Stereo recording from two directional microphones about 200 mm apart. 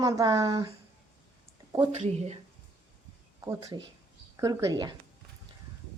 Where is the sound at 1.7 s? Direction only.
30° right (ahead or behind).